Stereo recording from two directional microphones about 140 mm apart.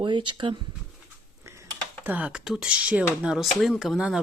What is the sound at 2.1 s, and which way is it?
Speech, 10° right (ahead or behind).